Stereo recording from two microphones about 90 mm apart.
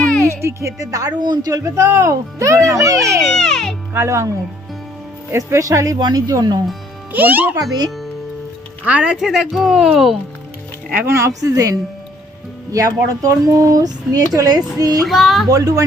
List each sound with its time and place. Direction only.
0.0 s music: 10° left (ahead or behind)
0.3 s a woman's voice: 30° right (ahead or behind)
3.3 s speech: 5° left (ahead or behind)
3.9 s a woman's voice: 30° right (ahead or behind)
7.1 s a child's voice: 20° right (ahead or behind)
7.5 s speech: 45° right (ahead or behind)
8.8 s speech: 15° right (ahead or behind)
9.2 s speech: 5° right (ahead or behind)
10.9 s a woman's voice: 30° right (ahead or behind); by 15.0 s 45° right (ahead or behind)
15.0 s speech: centre (ahead or behind)
15.4 s a woman's voice: 40° right (ahead or behind)